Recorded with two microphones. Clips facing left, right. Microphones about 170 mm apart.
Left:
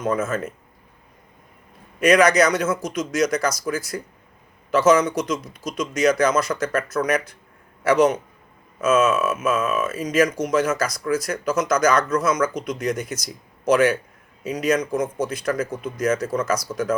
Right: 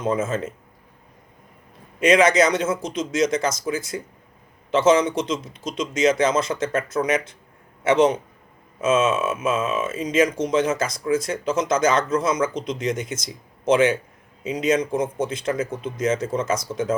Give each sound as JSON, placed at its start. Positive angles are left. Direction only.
{"t": 0.0, "sound": "speech", "side_deg": -25}
{"t": 2.0, "sound": "speech", "side_deg": -25}